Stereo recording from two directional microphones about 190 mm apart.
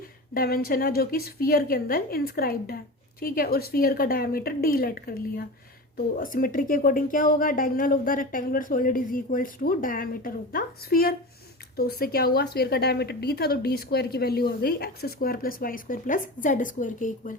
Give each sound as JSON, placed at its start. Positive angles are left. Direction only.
{"t": 0.3, "sound": "a woman's voice", "side_deg": 50}